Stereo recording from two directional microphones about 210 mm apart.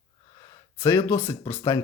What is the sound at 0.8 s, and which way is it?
Speech, 15° left (ahead or behind).